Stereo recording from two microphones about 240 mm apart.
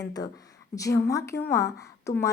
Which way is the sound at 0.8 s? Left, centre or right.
Centre.